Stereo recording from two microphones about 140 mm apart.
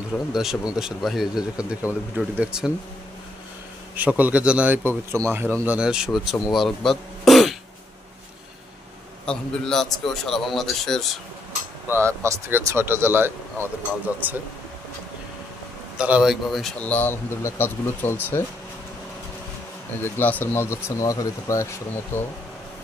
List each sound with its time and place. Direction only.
0.3 s a man's voice: 5° right (ahead or behind)
3.9 s a man's voice: 10° right (ahead or behind)
9.2 s a man's voice: 5° left (ahead or behind)
11.9 s a man's voice: 20° right (ahead or behind)
16.0 s speech: 5° right (ahead or behind); by 18.4 s 15° left (ahead or behind)
20.0 s speech: 15° left (ahead or behind)